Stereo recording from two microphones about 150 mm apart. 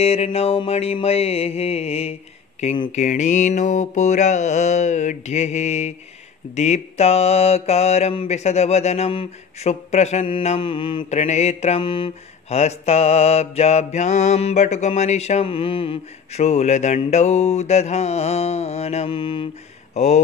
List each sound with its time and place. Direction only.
0.0 s mantra: 40° left (ahead or behind)
2.9 s mantra: 55° left (ahead or behind); by 11.1 s 35° left (ahead or behind)
11.1 s mantra: 50° left (ahead or behind)
11.8 s speech: 35° left (ahead or behind)
12.5 s mantra: 45° left (ahead or behind)